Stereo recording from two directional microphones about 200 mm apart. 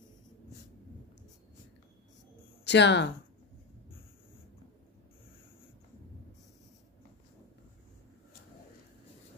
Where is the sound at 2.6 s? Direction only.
60° left (ahead or behind).